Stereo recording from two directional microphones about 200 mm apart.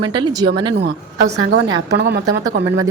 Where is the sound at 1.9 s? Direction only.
55° right (ahead or behind).